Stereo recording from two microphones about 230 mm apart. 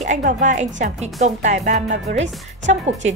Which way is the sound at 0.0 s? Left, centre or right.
Right.